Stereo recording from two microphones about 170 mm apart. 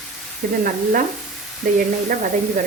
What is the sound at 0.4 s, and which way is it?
Speech, 55° right (ahead or behind).